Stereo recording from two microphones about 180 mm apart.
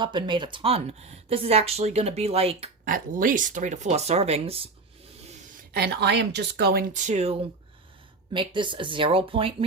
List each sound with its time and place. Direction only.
0.0 s speech: 25° right (ahead or behind)
2.8 s speech: 50° right (ahead or behind); by 4.7 s 35° right (ahead or behind)
5.7 s speech: 70° right (ahead or behind); by 7.3 s 40° right (ahead or behind)
8.3 s speech: 25° right (ahead or behind)